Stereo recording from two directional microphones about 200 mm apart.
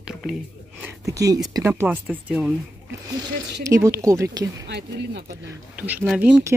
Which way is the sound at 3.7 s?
15° right (ahead or behind).